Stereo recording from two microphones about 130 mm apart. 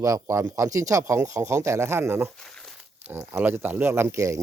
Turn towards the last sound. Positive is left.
turn(degrees=-25)  # may be behind; listen again after turning